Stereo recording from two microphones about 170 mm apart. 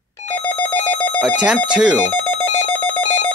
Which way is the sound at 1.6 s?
5° right (ahead or behind).